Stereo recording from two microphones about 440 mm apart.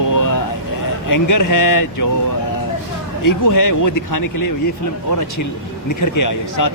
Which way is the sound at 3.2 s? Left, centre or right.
Left.